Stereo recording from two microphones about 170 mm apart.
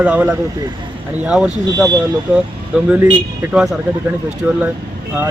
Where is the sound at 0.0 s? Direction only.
10° right (ahead or behind).